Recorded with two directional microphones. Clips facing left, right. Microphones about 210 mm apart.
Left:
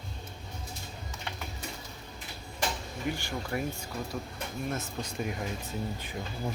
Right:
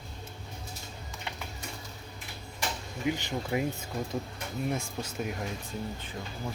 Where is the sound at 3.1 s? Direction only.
20° right (ahead or behind).